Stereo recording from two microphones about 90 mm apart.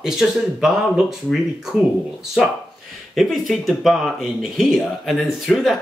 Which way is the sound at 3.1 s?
Centre (ahead or behind).